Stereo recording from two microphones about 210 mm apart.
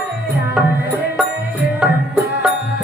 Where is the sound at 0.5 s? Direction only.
5° right (ahead or behind).